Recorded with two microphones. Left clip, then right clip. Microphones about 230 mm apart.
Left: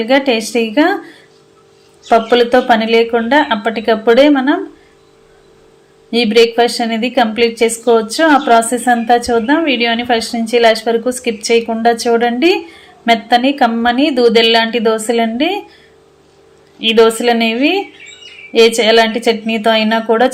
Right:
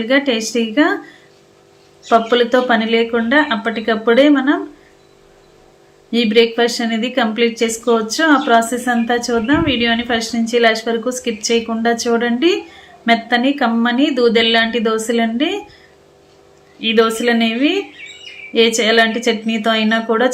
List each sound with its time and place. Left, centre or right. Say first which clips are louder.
0.0 s a woman's voice: left 3 dB; centre
2.0 s a woman's voice: left 3 dB; centre
6.1 s a woman's voice: left 3 dB; centre
16.8 s a woman's voice: left 4 dB; centre